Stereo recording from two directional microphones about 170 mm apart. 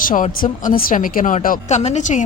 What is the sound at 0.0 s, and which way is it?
A woman's voice, 50° left (ahead or behind).